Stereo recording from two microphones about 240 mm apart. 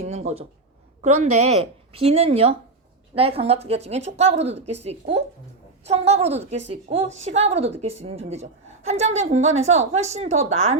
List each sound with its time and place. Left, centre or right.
0.0 s a woman's voice: right